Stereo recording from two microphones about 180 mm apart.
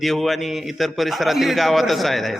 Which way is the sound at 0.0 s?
Centre (ahead or behind).